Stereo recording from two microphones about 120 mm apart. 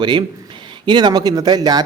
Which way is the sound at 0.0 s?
40° right (ahead or behind).